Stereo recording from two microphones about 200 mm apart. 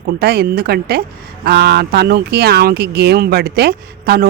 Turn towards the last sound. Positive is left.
turn(degrees=-50)  # may be behind; listen again after turning